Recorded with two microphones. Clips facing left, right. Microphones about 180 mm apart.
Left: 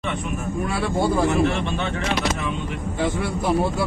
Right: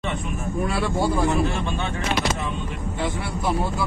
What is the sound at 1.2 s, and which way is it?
Speech, 65° left (ahead or behind).